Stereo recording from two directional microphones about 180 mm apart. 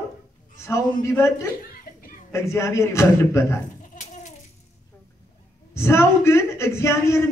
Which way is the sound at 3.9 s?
45° left (ahead or behind).